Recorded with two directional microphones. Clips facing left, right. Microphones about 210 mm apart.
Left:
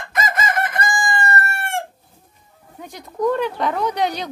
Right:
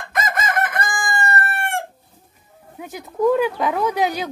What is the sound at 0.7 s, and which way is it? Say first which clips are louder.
Chicken: left 2 dB; 55° right (ahead or behind).